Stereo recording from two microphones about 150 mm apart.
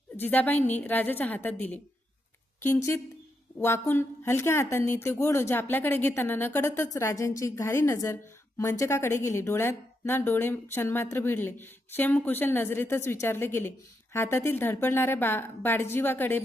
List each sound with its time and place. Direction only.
0.2 s a woman's voice: 10° left (ahead or behind)